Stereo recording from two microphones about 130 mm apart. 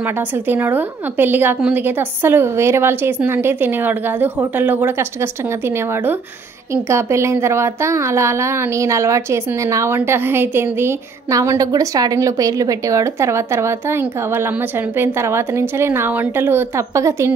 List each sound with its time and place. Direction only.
0.0 s a woman's voice: 15° right (ahead or behind)